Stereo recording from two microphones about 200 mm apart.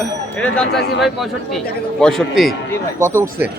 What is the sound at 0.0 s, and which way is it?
Speech, 5° left (ahead or behind).